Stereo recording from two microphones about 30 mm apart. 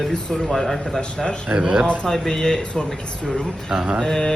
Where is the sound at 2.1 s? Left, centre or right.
Left.